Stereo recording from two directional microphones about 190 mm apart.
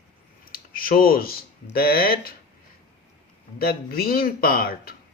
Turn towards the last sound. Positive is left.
turn(degrees=50)  # may be behind; listen again after turning